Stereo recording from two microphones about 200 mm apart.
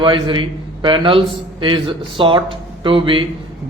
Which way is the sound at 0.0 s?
25° right (ahead or behind).